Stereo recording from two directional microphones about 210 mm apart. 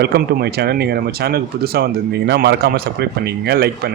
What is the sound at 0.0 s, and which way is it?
Speech, 50° right (ahead or behind).